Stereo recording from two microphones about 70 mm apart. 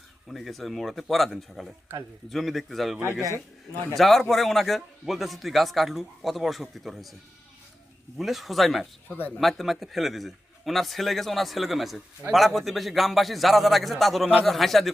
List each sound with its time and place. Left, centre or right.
0.3 s a man's voice: centre
3.2 s a man's voice: right
3.9 s a man's voice: centre
8.2 s a man's voice: centre
9.0 s speech: left
9.4 s a man's voice: centre